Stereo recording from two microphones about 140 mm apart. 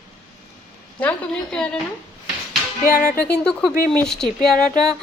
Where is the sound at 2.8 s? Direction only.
80° left.